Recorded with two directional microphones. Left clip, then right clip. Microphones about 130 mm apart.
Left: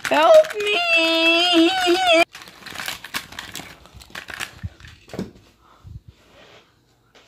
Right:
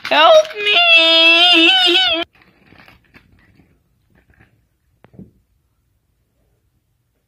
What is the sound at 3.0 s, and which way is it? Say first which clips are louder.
Typewriter: left 19 dB; 35° left (ahead or behind).